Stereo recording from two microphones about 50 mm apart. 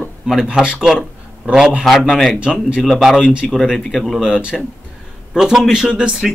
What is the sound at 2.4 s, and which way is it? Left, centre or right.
Speech, right.